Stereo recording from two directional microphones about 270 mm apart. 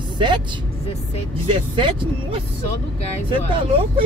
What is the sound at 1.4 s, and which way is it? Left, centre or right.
Speech, centre.